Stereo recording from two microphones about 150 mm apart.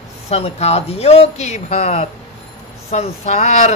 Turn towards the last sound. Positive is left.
turn(degrees=50)  # may be behind; listen again after turning